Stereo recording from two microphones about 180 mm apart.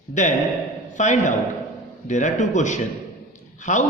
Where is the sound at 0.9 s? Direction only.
40° left (ahead or behind).